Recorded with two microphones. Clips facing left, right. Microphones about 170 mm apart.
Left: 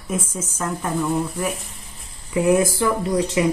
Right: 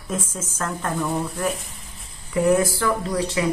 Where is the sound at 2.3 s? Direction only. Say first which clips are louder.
Left 1 dB; 15° left (ahead or behind).